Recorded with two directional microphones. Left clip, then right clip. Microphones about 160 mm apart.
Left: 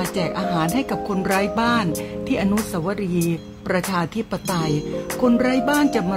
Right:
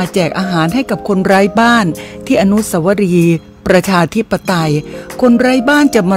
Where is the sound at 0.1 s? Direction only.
55° right (ahead or behind).